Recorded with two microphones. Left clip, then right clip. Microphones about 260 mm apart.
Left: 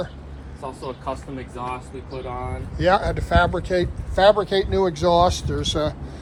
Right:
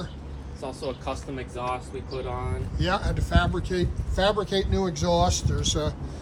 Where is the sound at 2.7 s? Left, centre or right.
Centre.